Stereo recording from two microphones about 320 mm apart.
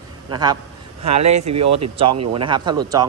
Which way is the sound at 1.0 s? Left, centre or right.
Right.